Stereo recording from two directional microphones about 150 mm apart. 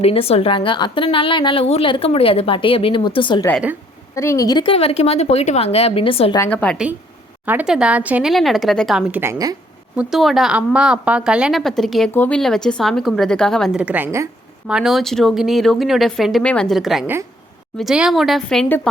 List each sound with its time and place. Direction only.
0.0 s a woman's voice: 40° left (ahead or behind)
4.1 s a woman's voice: 20° left (ahead or behind); by 6.3 s 40° left (ahead or behind)
6.5 s a woman's voice: 10° left (ahead or behind)
7.4 s speech: 10° right (ahead or behind)
9.1 s a woman's voice: 15° right (ahead or behind)
9.9 s speech: 5° right (ahead or behind)
12.1 s a woman's voice: 15° left (ahead or behind)
13.7 s a woman's voice: 10° right (ahead or behind)
14.7 s speech: 5° right (ahead or behind)